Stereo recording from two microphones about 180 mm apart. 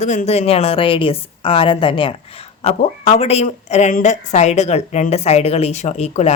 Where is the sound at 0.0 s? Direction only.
40° left (ahead or behind).